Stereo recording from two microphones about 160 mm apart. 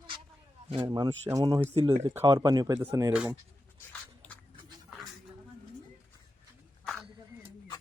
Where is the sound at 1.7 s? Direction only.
35° right (ahead or behind); by 3.1 s 15° right (ahead or behind).